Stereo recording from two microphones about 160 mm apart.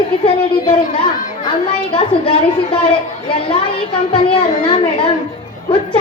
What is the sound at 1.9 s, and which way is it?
Speech, 30° left (ahead or behind).